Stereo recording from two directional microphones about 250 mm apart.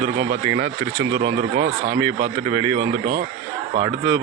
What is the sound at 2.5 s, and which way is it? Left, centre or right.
Speech, right.